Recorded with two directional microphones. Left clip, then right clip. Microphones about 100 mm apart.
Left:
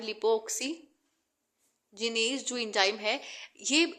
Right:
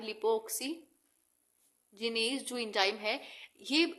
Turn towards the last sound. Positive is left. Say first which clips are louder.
# left 3 dB
turn(degrees=15)  # may be behind; listen again after turning